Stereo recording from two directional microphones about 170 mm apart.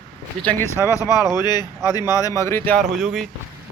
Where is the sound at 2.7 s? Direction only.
Centre (ahead or behind).